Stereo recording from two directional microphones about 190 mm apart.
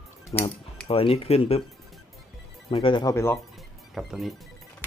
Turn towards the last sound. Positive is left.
turn(degrees=0)  # may be behind; listen again after turning